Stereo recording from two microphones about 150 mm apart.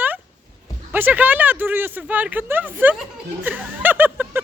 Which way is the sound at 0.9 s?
10° right (ahead or behind).